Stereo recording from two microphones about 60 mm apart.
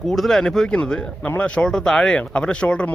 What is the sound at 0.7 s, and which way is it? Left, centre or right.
Speech, centre.